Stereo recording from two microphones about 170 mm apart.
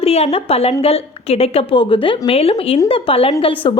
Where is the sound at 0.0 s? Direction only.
35° left (ahead or behind).